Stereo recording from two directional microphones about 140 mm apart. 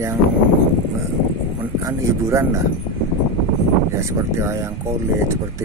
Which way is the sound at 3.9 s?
20° right (ahead or behind).